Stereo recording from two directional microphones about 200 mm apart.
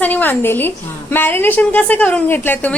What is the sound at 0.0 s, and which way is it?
A woman's voice, 10° left (ahead or behind).